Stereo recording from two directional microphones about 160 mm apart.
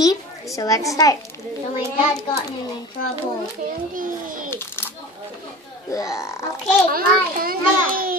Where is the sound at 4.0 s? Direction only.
60° right (ahead or behind).